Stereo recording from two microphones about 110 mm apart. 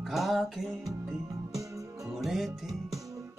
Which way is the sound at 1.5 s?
30° right (ahead or behind).